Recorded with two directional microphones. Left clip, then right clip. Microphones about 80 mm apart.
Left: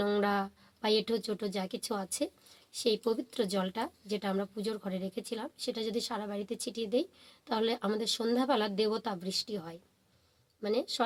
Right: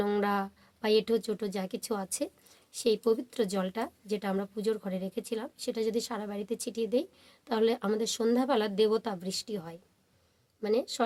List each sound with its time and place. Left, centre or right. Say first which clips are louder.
0.0 s a woman's voice: right 1 dB; right